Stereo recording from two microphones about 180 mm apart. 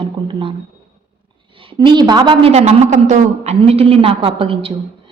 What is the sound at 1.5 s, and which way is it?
A woman's voice, 30° right (ahead or behind).